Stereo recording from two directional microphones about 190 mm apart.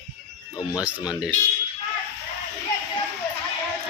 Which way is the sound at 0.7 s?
5° right (ahead or behind).